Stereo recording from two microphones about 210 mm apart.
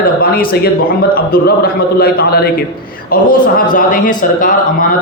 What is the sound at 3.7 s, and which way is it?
A man's voice, 40° left (ahead or behind).